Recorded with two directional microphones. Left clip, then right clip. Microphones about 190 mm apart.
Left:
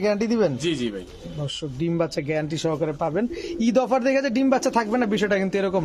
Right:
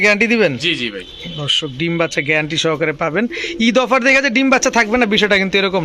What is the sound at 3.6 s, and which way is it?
A man's voice, 10° right (ahead or behind).